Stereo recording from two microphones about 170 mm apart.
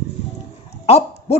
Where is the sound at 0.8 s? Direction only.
40° left (ahead or behind).